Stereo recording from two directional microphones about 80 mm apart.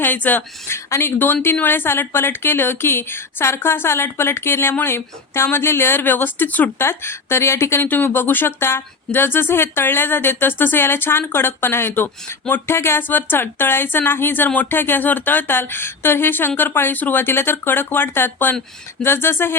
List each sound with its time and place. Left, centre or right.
0.0 s a woman's voice: left
6.8 s speech: left